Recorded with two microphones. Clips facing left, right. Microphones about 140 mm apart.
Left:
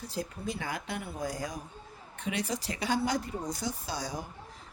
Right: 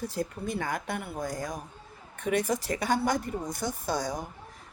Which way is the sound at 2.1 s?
50° right (ahead or behind).